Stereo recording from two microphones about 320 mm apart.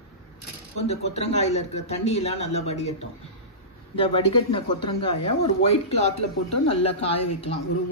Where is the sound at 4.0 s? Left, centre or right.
Centre.